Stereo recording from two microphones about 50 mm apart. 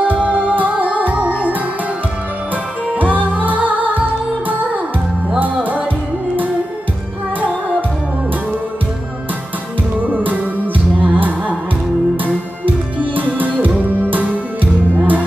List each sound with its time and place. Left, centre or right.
0.2 s music: right
3.0 s music: right
10.0 s music: right
12.6 s music: right